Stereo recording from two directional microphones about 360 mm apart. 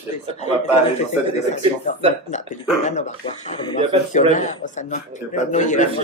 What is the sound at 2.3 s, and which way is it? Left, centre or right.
A man's voice, centre.